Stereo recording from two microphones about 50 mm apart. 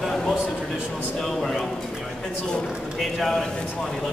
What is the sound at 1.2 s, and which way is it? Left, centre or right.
Speech, centre.